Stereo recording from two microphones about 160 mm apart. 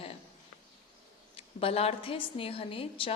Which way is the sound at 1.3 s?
35° left (ahead or behind).